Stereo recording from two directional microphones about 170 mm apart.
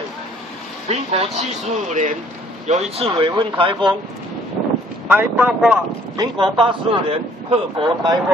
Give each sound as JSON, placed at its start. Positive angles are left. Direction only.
{"t": 0.8, "sound": "a man's voice", "side_deg": -40}
{"t": 3.1, "sound": "speech", "side_deg": -30}
{"t": 5.0, "sound": "speech", "side_deg": -10}
{"t": 6.1, "sound": "speech", "side_deg": -30}